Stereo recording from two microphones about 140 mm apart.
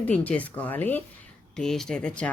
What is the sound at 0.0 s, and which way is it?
Speech, 10° left (ahead or behind).